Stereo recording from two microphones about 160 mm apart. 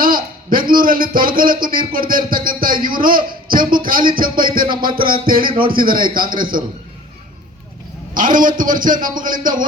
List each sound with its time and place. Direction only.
0.0 s a man's voice: 65° right (ahead or behind)
8.1 s a man's voice: 60° right (ahead or behind)